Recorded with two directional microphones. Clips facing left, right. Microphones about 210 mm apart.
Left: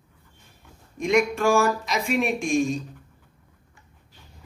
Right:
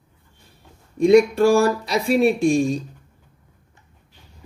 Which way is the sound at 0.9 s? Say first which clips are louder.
Right 8 dB; 35° right (ahead or behind).